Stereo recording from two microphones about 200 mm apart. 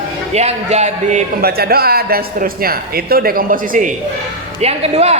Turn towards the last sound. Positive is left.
turn(degrees=-30)  # may be behind; listen again after turning